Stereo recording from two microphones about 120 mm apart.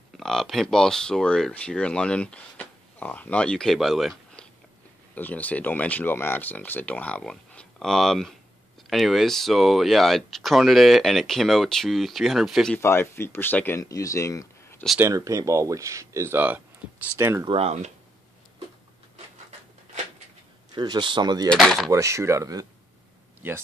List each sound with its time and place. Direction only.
0.2 s speech: centre (ahead or behind)
12.7 s speech: 20° left (ahead or behind)
15.0 s speech: 25° right (ahead or behind)
17.5 s speech: 60° right (ahead or behind)
20.7 s a man's voice: 35° right (ahead or behind)
21.5 s speech: 5° left (ahead or behind)
21.9 s speech: 25° right (ahead or behind)
23.4 s speech: 15° right (ahead or behind)